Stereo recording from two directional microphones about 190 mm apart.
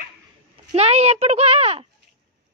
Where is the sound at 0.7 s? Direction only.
35° right (ahead or behind).